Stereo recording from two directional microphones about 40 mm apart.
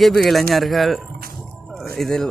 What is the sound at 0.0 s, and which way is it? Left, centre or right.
A man's voice, centre.